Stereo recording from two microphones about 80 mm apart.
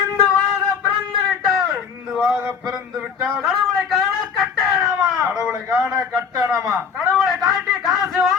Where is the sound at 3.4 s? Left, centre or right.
Centre.